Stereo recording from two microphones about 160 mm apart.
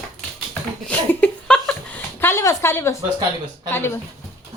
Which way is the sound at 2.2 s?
15° left (ahead or behind).